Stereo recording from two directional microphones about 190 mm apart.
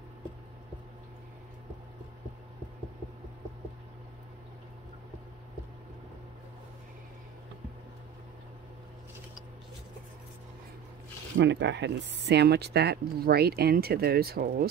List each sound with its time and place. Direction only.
11.3 s speech: 65° right (ahead or behind)